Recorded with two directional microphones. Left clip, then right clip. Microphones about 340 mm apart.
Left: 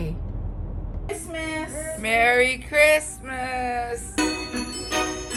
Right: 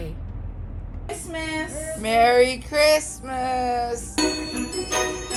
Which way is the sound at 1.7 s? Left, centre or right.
Centre.